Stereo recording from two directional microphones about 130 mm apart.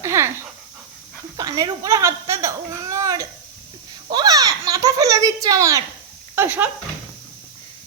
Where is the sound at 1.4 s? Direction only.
30° right (ahead or behind).